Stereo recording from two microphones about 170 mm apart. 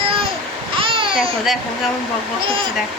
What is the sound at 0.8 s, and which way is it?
Babbling, 30° right (ahead or behind).